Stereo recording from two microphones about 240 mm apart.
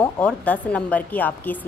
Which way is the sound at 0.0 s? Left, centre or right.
Centre.